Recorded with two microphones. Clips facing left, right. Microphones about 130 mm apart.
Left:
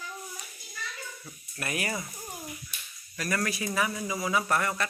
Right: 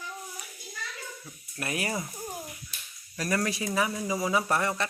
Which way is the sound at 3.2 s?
30° right (ahead or behind).